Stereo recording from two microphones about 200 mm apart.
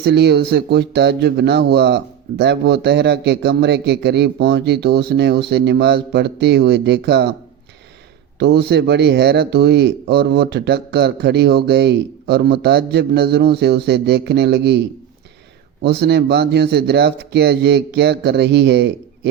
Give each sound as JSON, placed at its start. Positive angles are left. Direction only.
{"t": 0.0, "sound": "speech", "side_deg": -55}
{"t": 8.4, "sound": "speech", "side_deg": -55}